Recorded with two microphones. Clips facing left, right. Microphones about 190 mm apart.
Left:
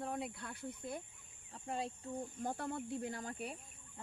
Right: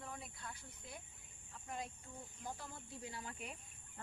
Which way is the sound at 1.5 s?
30° left (ahead or behind).